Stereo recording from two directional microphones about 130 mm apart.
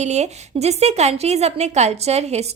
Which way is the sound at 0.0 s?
60° right (ahead or behind).